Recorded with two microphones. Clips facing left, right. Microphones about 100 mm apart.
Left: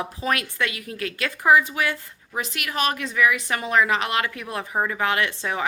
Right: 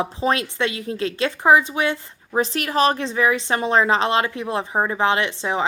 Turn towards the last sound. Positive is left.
turn(degrees=-20)  # may be behind; listen again after turning